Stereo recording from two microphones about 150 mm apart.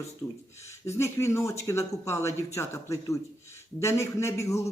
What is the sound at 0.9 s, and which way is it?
Speech, 20° left (ahead or behind).